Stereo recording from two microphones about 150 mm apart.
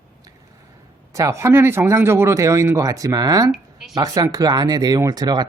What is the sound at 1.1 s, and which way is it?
Speech, 20° right (ahead or behind).